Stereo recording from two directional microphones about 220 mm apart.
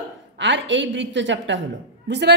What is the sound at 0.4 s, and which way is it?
A woman's voice, 55° right (ahead or behind).